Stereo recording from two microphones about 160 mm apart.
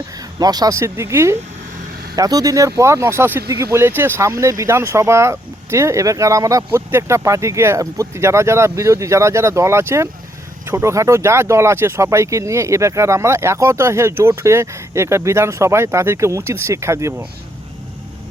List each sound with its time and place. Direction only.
0.3 s speech: 25° right (ahead or behind)